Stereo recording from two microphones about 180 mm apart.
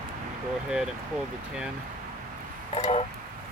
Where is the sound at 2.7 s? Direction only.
30° left (ahead or behind).